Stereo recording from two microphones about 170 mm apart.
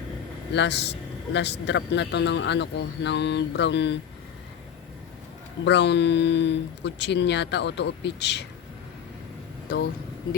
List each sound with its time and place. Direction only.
0.5 s a man's voice: 90° left
5.6 s a man's voice: 90° left